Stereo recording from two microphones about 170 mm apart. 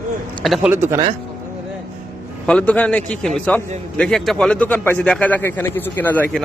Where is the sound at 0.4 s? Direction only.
Centre (ahead or behind).